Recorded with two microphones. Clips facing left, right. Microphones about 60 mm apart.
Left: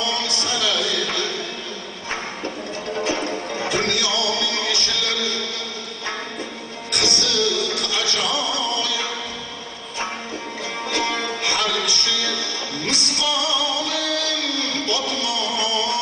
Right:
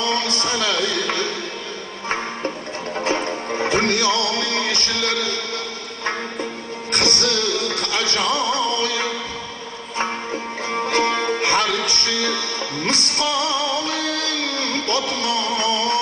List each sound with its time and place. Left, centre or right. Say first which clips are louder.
0.0 s music: right 3 dB; right
3.0 s music: right 2 dB; right
6.9 s music: right 2 dB; right
10.7 s music: right 5 dB; right